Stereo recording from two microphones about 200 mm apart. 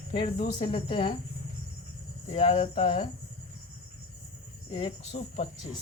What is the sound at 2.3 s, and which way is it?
Speech, 30° left (ahead or behind).